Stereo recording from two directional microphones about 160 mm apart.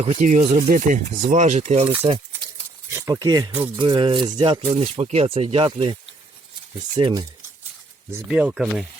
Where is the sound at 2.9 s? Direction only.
20° right (ahead or behind).